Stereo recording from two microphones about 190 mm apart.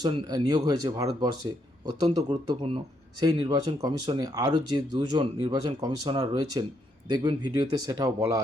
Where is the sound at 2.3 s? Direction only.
30° right (ahead or behind).